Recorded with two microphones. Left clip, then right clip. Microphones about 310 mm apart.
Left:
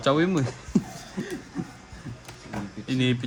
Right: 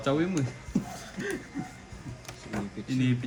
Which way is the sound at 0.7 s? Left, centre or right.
Left.